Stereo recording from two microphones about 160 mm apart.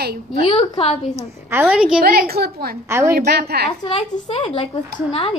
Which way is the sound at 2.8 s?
15° right (ahead or behind).